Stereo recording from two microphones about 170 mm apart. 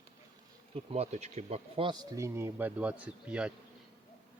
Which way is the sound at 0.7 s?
40° right (ahead or behind).